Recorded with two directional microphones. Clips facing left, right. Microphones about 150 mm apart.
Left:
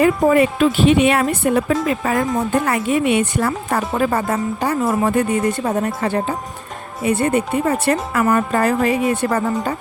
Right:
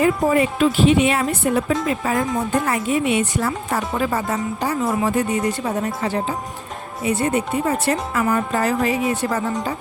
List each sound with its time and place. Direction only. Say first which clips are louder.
0.0 s speech: left 3 dB; 65° left (ahead or behind)